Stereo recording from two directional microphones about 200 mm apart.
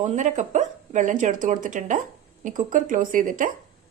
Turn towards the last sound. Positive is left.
turn(degrees=-40)  # may be behind; listen again after turning